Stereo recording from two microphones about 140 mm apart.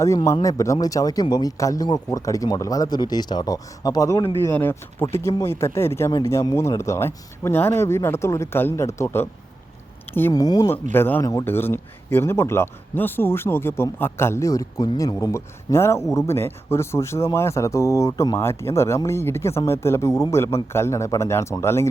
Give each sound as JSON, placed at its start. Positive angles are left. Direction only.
{"t": 0.0, "sound": "speech", "side_deg": 20}
{"t": 4.5, "sound": "speech", "side_deg": 15}
{"t": 10.3, "sound": "speech", "side_deg": 25}
{"t": 10.9, "sound": "speech", "side_deg": 15}